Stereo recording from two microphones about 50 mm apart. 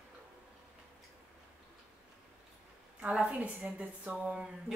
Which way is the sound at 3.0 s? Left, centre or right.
Right.